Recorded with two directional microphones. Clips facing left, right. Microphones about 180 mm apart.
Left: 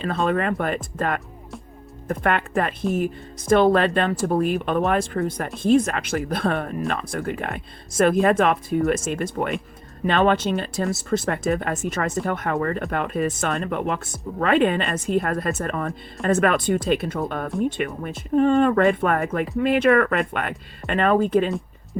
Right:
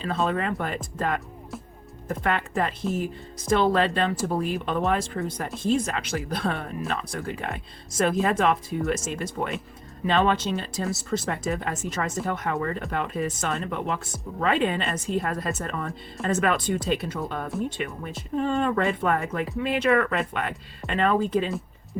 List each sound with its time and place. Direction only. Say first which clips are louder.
0.0 s speech: left 4 dB; 60° left (ahead or behind)